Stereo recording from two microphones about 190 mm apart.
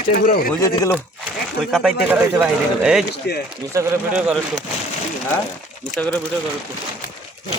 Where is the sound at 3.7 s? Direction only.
5° right (ahead or behind).